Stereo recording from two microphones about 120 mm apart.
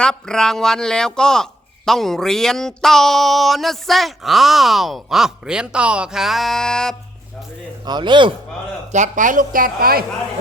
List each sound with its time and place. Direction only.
0.0 s speech: 5° left (ahead or behind)
7.9 s speech: 40° right (ahead or behind)
8.9 s speech: 85° right